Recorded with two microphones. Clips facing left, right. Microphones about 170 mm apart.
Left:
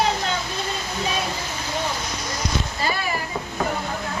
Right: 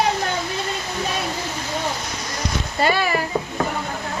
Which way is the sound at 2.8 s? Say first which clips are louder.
Right 9 dB; 80° right.